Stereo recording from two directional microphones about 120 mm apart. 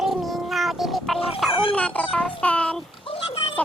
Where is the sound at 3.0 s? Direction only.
50° left (ahead or behind).